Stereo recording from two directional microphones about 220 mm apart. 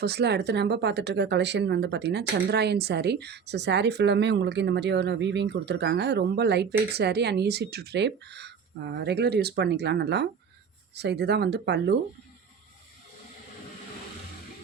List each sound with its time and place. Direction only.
0.0 s speech: 50° right (ahead or behind)